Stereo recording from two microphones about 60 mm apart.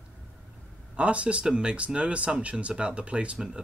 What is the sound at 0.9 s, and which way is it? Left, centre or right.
Speech, right.